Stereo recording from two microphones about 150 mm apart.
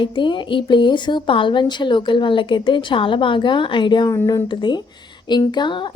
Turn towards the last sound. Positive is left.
turn(degrees=30)  # may be behind; listen again after turning